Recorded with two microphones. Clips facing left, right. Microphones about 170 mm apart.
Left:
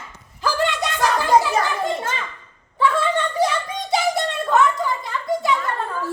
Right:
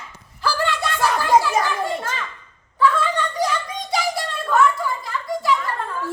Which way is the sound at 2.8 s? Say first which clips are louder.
Even; 25° left (ahead or behind).